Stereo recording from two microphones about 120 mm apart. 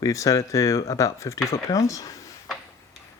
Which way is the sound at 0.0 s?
30° left (ahead or behind).